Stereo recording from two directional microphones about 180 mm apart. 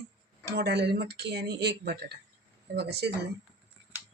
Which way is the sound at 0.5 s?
65° right (ahead or behind).